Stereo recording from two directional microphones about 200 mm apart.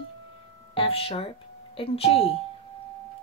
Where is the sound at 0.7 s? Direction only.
25° left (ahead or behind).